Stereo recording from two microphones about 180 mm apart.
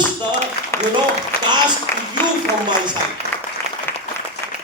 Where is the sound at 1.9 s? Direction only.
60° left (ahead or behind).